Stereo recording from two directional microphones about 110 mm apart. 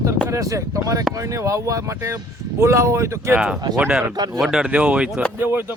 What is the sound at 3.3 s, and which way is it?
Speech, 5° right (ahead or behind).